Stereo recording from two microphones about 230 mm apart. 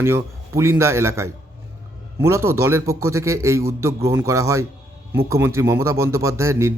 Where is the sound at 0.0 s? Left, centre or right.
Centre.